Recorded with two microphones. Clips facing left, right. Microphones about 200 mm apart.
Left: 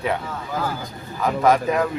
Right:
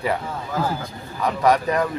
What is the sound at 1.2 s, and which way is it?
Speech, centre (ahead or behind).